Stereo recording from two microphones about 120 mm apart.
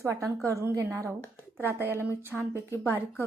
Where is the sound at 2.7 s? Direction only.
15° left (ahead or behind).